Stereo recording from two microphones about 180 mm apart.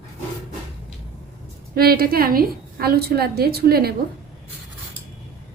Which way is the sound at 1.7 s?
55° right (ahead or behind).